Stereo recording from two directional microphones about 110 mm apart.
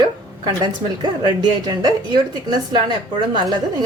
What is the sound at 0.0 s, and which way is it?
Speech, 45° right (ahead or behind).